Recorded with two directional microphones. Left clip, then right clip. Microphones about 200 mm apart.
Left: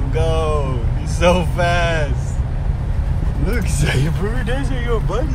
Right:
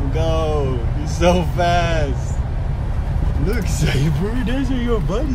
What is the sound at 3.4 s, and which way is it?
Speech, 5° left (ahead or behind).